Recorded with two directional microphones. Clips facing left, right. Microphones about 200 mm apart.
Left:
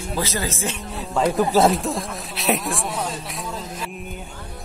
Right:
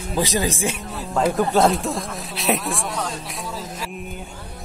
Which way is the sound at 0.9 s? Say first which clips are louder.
Left 1 dB; centre (ahead or behind).